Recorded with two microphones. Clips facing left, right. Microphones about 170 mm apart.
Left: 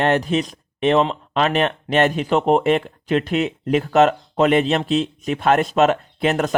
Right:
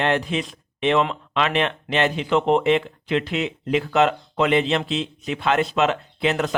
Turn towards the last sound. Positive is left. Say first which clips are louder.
# left 3 dB
turn(degrees=45)  # may be behind; listen again after turning